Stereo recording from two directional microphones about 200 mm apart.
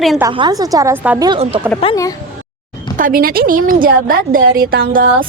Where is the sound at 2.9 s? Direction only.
45° right (ahead or behind).